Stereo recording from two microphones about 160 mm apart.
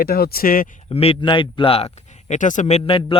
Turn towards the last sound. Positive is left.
turn(degrees=35)  # may be behind; listen again after turning